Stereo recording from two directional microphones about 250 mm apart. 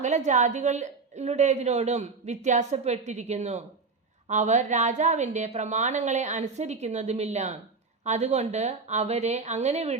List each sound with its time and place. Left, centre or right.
0.0 s a woman's voice: right